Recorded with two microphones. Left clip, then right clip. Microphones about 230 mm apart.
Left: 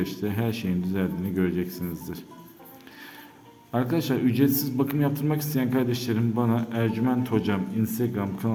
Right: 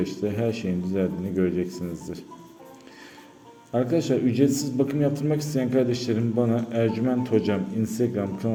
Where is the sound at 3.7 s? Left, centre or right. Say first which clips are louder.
Right 3 dB; centre.